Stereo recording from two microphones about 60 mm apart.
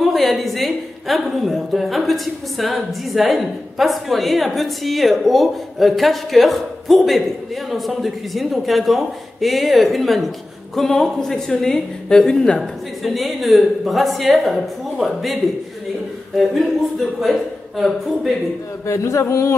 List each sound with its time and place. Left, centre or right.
0.0 s a woman's voice: centre
13.0 s a woman's voice: centre
16.3 s a woman's voice: centre
18.9 s speech: left